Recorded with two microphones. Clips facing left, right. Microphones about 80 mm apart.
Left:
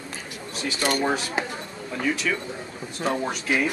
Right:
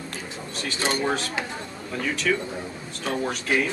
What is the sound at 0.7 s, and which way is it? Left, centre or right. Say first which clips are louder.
Speech: left 1 dB; right.